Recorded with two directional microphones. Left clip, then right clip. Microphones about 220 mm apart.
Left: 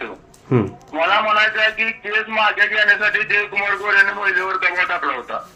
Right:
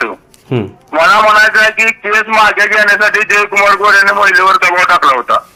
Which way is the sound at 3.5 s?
50° right (ahead or behind).